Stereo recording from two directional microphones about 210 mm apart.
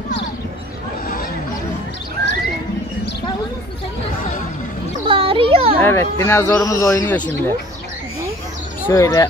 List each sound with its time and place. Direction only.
2.2 s pigeon: 50° right (ahead or behind)
5.0 s a sound: 25° right (ahead or behind)
5.8 s speech: 10° left (ahead or behind)
8.8 s speech: 10° left (ahead or behind)